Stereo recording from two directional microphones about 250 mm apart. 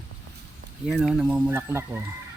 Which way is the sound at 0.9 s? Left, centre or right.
Centre.